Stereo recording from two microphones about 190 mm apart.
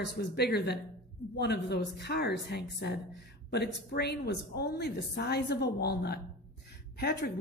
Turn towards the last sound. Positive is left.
turn(degrees=60)  # may be behind; listen again after turning